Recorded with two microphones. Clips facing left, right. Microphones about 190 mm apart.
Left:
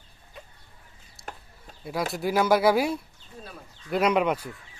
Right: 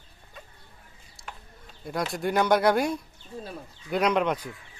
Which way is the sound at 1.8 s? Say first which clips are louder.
Left 1 dB; 5° left (ahead or behind).